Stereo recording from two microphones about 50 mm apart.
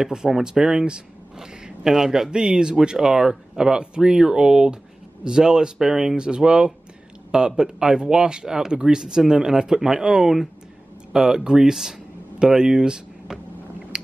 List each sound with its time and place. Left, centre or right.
0.0 s speech: centre
13.9 s finger snapping: centre